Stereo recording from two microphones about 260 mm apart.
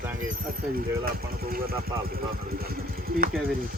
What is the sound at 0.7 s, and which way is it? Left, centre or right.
Speech, right.